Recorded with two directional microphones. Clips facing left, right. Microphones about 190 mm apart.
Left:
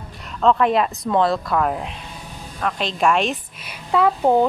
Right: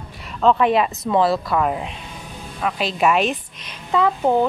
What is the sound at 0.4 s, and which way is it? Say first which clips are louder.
A woman's voice: right 1 dB; centre (ahead or behind).